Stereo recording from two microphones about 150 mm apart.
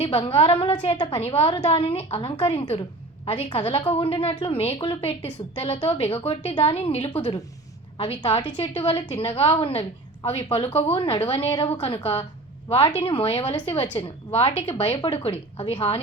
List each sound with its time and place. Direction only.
0.0 s a woman's voice: 40° left (ahead or behind)